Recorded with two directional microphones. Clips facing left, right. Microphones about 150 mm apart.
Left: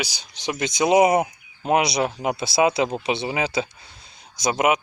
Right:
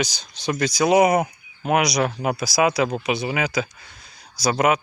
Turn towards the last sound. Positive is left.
turn(degrees=20)  # may be behind; listen again after turning